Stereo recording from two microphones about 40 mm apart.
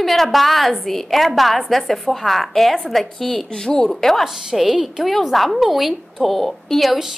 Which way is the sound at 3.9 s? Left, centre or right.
Centre.